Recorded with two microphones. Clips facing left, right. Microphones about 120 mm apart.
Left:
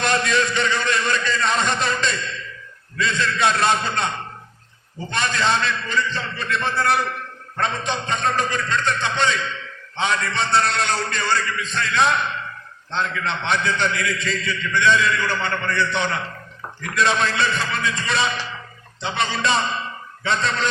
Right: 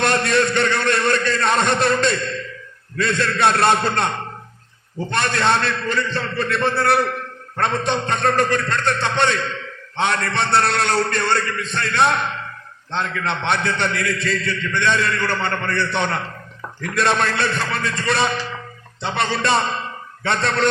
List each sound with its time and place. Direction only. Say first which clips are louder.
0.0 s a sound: right 3 dB; 55° right (ahead or behind)
3.0 s a man's voice: right 3 dB; 55° right (ahead or behind)
5.1 s a man's voice: right 2 dB; 55° right (ahead or behind)